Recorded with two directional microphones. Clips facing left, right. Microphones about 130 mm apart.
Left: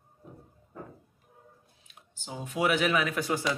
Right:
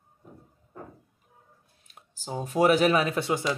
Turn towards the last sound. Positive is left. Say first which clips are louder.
# right 3 dB
turn(degrees=-25)  # may be behind; listen again after turning